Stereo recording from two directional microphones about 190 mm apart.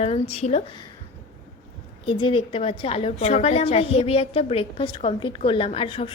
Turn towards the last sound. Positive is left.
turn(degrees=30)  # may be behind; listen again after turning